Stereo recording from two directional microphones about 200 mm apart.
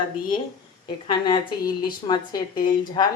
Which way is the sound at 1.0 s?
25° left (ahead or behind).